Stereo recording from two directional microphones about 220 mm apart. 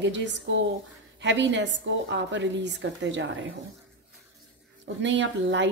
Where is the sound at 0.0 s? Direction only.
55° right (ahead or behind).